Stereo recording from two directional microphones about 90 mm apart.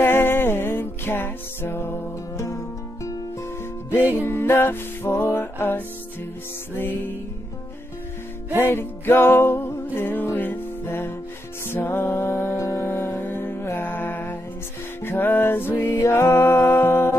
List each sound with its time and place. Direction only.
0.0 s music: 25° left (ahead or behind)
8.5 s music: 25° left (ahead or behind)
15.7 s music: 35° left (ahead or behind)